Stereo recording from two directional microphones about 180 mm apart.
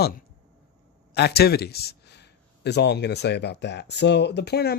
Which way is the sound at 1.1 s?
65° left (ahead or behind).